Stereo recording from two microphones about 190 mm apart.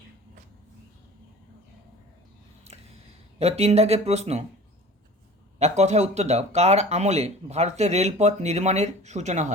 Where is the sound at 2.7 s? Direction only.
30° right (ahead or behind).